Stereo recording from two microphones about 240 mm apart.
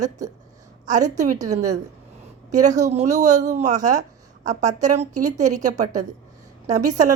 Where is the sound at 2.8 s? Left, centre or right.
Right.